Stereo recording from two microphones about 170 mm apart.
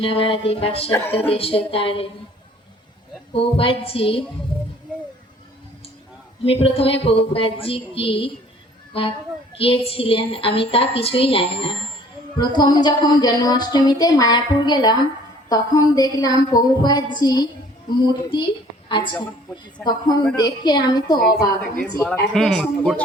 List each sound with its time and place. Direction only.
0.0 s a woman's voice: 30° left (ahead or behind)
0.9 s speech: 15° left (ahead or behind)
1.1 s a woman's voice: 35° left (ahead or behind)
3.3 s a woman's voice: 35° left (ahead or behind)
6.4 s a woman's voice: 35° left (ahead or behind)
12.4 s a sound: 25° left (ahead or behind)
18.3 s a child's voice: 30° left (ahead or behind)
19.8 s a sound: 25° left (ahead or behind)
21.9 s speech: 15° left (ahead or behind)
22.3 s speech: centre (ahead or behind)